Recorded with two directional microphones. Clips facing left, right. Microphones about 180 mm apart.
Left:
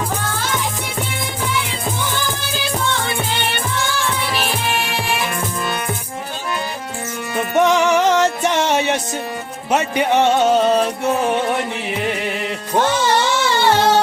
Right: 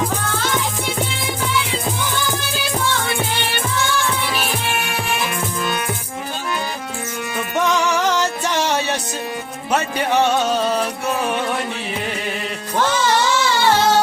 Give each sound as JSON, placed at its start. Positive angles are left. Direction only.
{"t": 7.5, "sound": "music", "side_deg": 25}